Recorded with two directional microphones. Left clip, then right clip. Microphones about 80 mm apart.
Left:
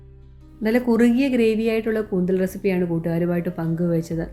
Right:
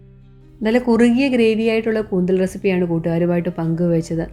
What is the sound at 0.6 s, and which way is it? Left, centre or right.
Speech, centre.